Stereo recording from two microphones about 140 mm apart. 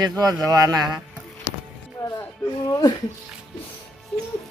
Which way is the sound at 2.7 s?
30° left (ahead or behind).